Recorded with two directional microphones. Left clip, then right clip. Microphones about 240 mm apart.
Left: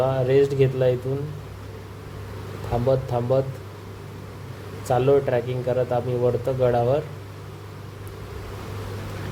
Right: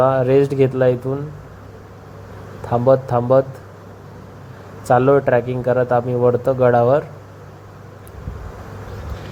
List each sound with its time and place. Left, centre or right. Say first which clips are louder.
0.0 s speech: right 5 dB; centre
2.7 s speech: right 8 dB; right
4.9 s speech: right 6 dB; centre